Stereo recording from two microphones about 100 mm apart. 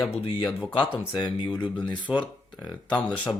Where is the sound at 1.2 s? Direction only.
50° left (ahead or behind).